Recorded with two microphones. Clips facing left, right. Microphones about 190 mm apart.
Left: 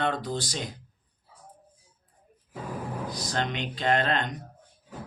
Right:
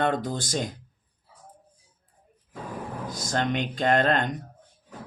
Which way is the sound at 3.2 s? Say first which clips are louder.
Right 6 dB; 45° right (ahead or behind).